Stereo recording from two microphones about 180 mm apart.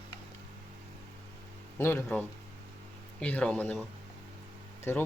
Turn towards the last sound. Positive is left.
turn(degrees=15)  # may be behind; listen again after turning